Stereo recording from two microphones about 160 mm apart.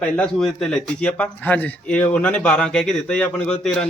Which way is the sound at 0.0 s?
5° left (ahead or behind).